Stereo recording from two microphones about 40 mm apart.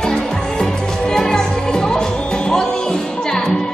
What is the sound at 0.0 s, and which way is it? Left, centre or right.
Music, centre.